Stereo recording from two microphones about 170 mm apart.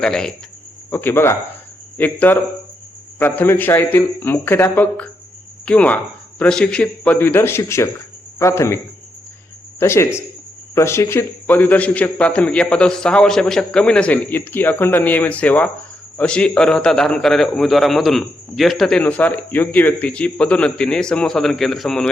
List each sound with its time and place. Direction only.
0.0 s a man's voice: 5° left (ahead or behind)
9.8 s a man's voice: 15° left (ahead or behind)